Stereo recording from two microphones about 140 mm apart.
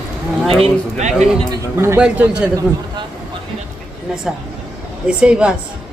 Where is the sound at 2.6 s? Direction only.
35° right (ahead or behind).